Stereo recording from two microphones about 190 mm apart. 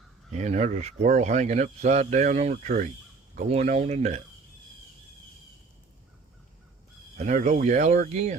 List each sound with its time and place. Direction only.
0.3 s speech: 40° right (ahead or behind)
7.2 s speech: 40° right (ahead or behind)